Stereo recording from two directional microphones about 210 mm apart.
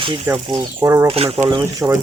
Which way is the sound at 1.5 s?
15° right (ahead or behind).